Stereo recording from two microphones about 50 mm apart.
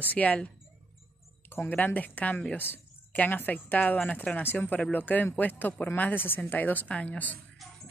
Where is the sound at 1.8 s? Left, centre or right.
Left.